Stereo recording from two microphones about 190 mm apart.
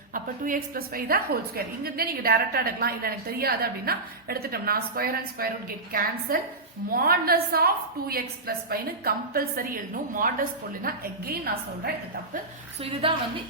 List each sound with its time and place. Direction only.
0.1 s a woman's voice: 45° right (ahead or behind)
12.8 s a woman's voice: 30° right (ahead or behind)